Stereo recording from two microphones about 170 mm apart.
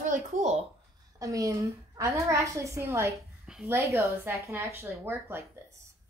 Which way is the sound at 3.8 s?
15° right (ahead or behind).